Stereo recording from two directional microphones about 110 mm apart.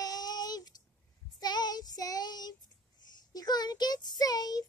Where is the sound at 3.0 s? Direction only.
40° left (ahead or behind).